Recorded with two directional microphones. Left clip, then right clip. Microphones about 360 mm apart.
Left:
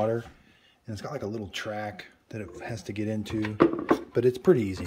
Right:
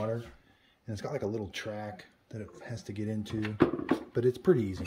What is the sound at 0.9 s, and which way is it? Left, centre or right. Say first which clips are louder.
Speech: even; centre.